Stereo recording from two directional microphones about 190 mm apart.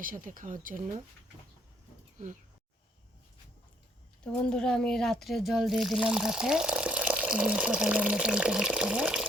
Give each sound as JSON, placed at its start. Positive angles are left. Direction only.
{"t": 0.0, "sound": "speech", "side_deg": -45}
{"t": 2.1, "sound": "speech", "side_deg": -40}
{"t": 4.4, "sound": "speech", "side_deg": 5}